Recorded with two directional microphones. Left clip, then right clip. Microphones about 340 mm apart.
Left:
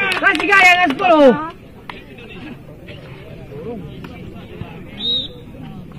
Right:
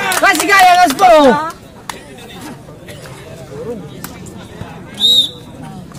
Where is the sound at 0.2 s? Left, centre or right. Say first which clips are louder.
Right 3 dB; centre.